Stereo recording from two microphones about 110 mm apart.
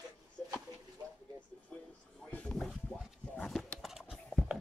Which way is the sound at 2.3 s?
5° left (ahead or behind).